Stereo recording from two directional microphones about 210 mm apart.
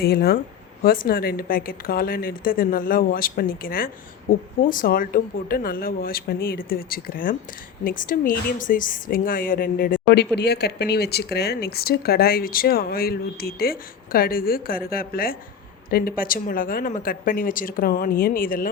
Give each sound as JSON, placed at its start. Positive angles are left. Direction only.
{"t": 0.0, "sound": "a woman's voice", "side_deg": 45}